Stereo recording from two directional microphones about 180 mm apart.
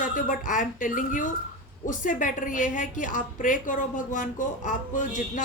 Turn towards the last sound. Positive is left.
turn(degrees=45)  # may be behind; listen again after turning